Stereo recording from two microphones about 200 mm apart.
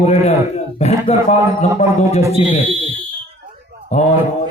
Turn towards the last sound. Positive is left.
turn(degrees=35)  # may be behind; listen again after turning